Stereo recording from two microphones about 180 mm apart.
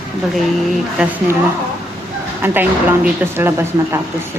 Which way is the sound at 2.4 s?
10° right (ahead or behind).